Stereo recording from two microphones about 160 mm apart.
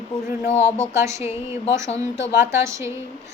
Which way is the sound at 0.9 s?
20° right (ahead or behind).